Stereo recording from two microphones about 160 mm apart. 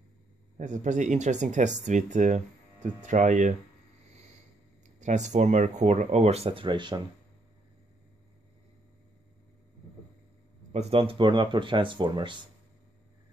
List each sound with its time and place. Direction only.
0.6 s speech: 50° right (ahead or behind)
5.0 s speech: 50° right (ahead or behind); by 7.0 s 30° right (ahead or behind)
10.7 s speech: 40° right (ahead or behind)